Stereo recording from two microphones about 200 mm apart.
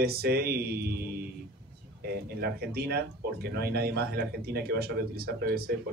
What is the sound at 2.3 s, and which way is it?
Speech, 50° right (ahead or behind).